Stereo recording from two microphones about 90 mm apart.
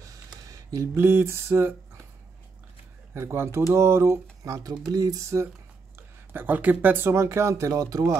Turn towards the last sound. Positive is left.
turn(degrees=-45)  # may be behind; listen again after turning